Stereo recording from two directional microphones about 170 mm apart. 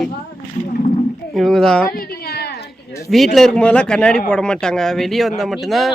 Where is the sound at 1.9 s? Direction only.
65° left (ahead or behind).